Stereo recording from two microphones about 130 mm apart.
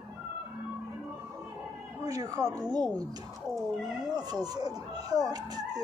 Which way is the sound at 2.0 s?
25° right (ahead or behind).